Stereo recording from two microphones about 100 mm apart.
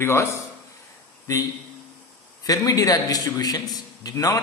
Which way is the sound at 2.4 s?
35° left (ahead or behind).